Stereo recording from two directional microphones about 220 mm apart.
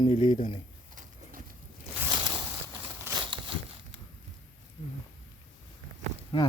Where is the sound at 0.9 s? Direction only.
35° right (ahead or behind).